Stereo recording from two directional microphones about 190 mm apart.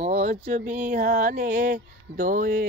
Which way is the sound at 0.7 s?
35° right (ahead or behind).